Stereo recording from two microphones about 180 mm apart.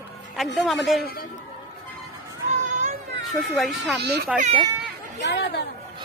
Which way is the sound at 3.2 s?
Centre (ahead or behind).